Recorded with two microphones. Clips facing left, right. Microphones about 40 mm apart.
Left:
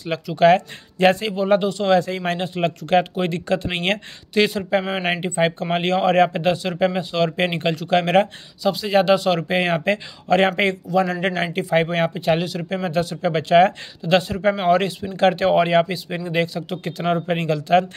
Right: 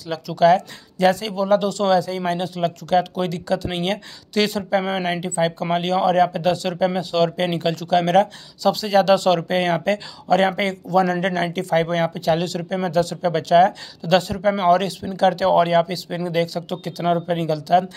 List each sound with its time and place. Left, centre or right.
0.4 s speech: left
1.9 s speech: left
4.3 s speech: left
6.5 s speech: centre
12.4 s speech: centre
12.6 s speech: left
15.1 s speech: left
15.8 s speech: left
17.3 s speech: left